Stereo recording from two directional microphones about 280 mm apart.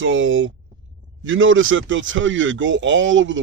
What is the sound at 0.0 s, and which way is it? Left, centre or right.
Speech, right.